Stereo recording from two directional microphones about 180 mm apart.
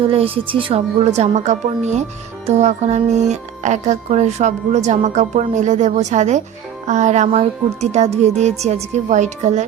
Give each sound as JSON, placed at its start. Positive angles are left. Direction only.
{"t": 0.4, "sound": "speech", "side_deg": -30}